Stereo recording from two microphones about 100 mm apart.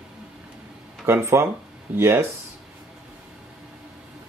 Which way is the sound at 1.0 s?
25° right (ahead or behind).